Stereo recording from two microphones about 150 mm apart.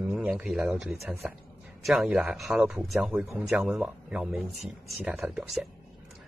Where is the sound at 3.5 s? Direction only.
5° right (ahead or behind).